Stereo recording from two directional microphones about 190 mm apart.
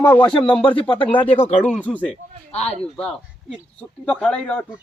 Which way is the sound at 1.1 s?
30° left (ahead or behind).